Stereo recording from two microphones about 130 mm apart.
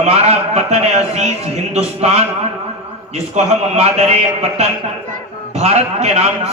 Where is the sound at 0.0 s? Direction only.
55° right (ahead or behind).